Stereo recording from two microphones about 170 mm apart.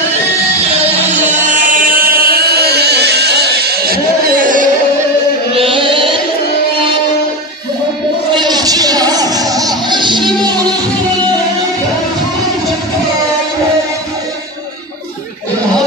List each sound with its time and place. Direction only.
0.6 s music: 45° right (ahead or behind)
5.5 s carnatic music: 30° right (ahead or behind)
8.4 s music: 25° right (ahead or behind)